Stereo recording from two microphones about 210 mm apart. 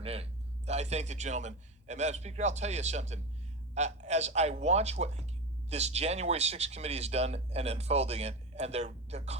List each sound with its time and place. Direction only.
0.0 s a man's voice: 30° right (ahead or behind)